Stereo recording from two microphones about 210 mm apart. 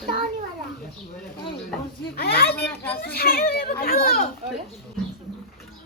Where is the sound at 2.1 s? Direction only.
45° left (ahead or behind).